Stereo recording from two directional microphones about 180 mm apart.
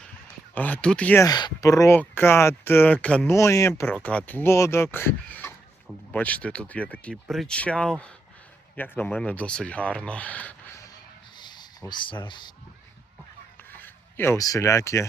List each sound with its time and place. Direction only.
0.5 s speech: 10° left (ahead or behind)
11.3 s a sound: 25° left (ahead or behind)
13.7 s speech: 10° left (ahead or behind)